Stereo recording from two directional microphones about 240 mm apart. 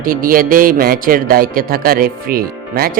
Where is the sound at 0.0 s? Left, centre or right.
Right.